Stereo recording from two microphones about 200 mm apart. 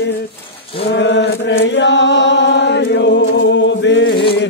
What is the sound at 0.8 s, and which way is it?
Chant, 60° left (ahead or behind).